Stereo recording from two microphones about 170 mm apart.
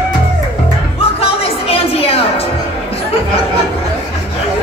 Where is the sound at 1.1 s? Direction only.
35° left (ahead or behind).